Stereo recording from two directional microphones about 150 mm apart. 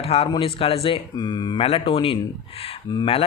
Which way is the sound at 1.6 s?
40° left (ahead or behind).